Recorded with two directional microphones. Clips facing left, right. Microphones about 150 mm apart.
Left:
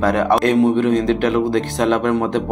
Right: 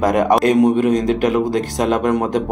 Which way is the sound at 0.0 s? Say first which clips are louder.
Right 1 dB; 15° right (ahead or behind).